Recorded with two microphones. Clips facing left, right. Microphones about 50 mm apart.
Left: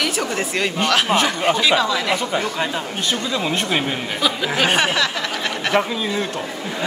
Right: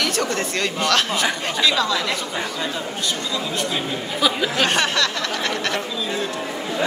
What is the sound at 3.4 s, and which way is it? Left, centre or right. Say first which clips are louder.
Speech: left 4 dB; left.